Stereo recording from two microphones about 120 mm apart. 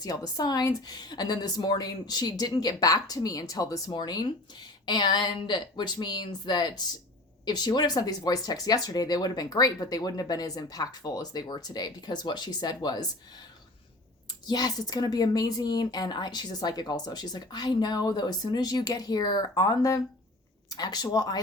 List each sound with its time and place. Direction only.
0.0 s speech: 30° left (ahead or behind)
14.4 s speech: 35° left (ahead or behind)